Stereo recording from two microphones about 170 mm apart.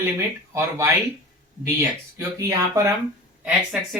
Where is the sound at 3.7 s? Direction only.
5° right (ahead or behind).